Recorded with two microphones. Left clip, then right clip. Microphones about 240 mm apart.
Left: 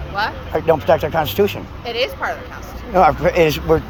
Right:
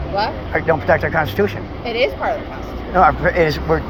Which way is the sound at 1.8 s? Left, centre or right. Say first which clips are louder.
Right 3 dB; centre.